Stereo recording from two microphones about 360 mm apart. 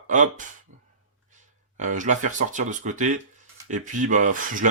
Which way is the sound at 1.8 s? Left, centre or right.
Right.